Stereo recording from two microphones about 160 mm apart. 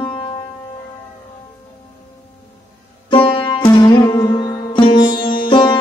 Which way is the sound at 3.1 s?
30° left (ahead or behind).